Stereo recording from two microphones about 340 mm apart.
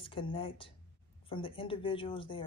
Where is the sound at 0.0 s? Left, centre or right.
Centre.